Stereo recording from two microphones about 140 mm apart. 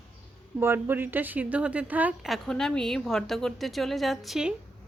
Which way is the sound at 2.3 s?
5° left (ahead or behind).